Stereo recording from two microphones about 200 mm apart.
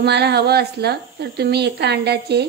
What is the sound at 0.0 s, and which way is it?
A woman's voice, 55° right (ahead or behind).